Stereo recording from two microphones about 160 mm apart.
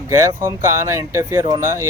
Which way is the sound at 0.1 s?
20° right (ahead or behind).